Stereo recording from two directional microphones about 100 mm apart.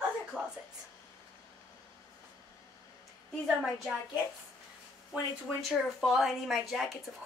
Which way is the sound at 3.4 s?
10° right (ahead or behind).